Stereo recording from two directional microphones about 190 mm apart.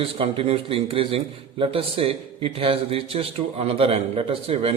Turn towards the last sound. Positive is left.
turn(degrees=-30)  # may be behind; listen again after turning